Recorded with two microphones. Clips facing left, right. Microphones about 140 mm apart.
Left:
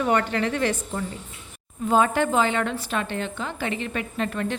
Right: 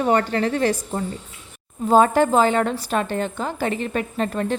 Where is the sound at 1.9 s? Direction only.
40° right (ahead or behind).